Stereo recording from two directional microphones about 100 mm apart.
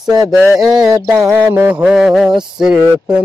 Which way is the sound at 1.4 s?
20° right (ahead or behind).